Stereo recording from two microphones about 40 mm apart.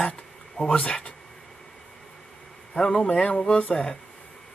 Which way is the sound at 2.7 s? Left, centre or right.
Centre.